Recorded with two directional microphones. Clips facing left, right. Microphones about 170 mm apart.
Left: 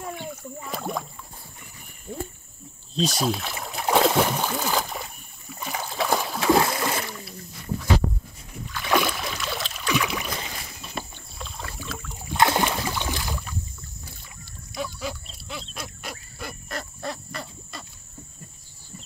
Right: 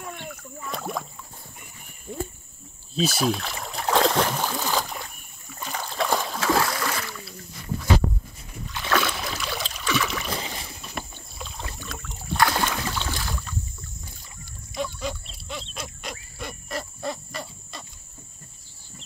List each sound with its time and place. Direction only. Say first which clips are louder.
0.0 s rowboat: left 3 dB; 10° left (ahead or behind)
2.9 s rowboat: right 1 dB; 5° right (ahead or behind)
4.5 s boat: left 1 dB; centre (ahead or behind)
6.4 s splash: left 5 dB; 20° left (ahead or behind)
8.8 s boat: left 2 dB; 15° left (ahead or behind)
9.2 s boat: even; centre (ahead or behind)
10.3 s boat: right 2 dB; 30° right (ahead or behind)
10.8 s rowboat: left 1 dB; centre (ahead or behind)
12.4 s rowboat: left 2 dB; 20° left (ahead or behind)
12.8 s boat: left 1 dB; 15° left (ahead or behind)
14.7 s pig: right 2 dB; 5° left (ahead or behind)
15.7 s wild animals: right 1 dB; 5° left (ahead or behind)